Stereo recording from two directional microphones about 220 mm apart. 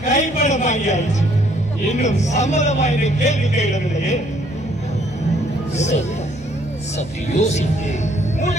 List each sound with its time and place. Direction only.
0.0 s a man's voice: 30° left (ahead or behind)
5.8 s a man's voice: 30° left (ahead or behind)
7.3 s a man's voice: 30° left (ahead or behind)